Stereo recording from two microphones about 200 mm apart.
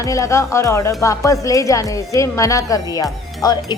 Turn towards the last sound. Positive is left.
turn(degrees=20)  # may be behind; listen again after turning